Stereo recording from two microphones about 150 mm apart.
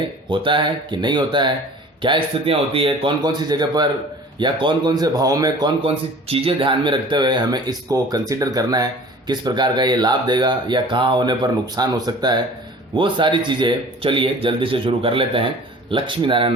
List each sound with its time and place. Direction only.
0.3 s speech: 35° right (ahead or behind)
6.2 s speech: 40° right (ahead or behind)